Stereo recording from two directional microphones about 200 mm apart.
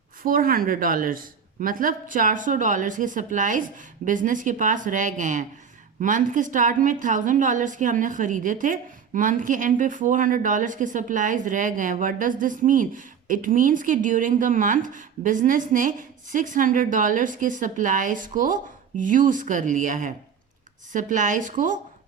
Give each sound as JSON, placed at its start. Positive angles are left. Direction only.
{"t": 0.2, "sound": "a woman's voice", "side_deg": -45}